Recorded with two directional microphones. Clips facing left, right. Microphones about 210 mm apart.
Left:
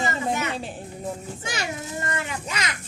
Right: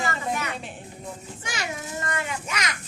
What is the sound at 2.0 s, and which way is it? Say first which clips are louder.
Speech: right 1 dB; 30° left (ahead or behind).